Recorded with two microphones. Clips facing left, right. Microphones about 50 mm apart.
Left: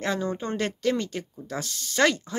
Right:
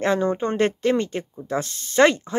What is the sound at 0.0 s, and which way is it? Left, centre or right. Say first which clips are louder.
Speech: right 7 dB; right.